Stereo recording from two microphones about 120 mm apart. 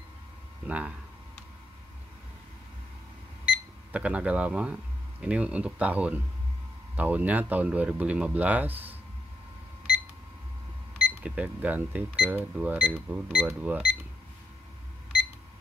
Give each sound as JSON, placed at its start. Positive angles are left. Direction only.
{"t": 0.7, "sound": "speech", "side_deg": -10}
{"t": 3.4, "sound": "speech", "side_deg": -10}
{"t": 11.1, "sound": "speech", "side_deg": -10}